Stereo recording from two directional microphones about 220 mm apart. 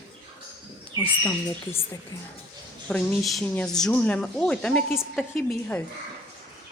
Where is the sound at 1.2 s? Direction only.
10° left (ahead or behind).